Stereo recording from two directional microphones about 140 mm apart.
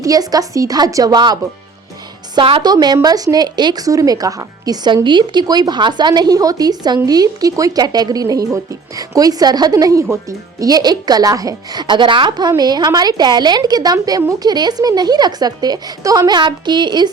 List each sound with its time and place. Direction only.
0.0 s a woman's voice: 25° right (ahead or behind)